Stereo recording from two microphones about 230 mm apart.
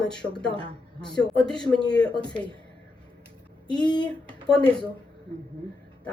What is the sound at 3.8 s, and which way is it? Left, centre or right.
Speech, centre.